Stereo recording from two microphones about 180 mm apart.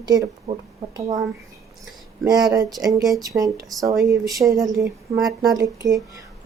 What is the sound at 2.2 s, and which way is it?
Speech, 20° right (ahead or behind).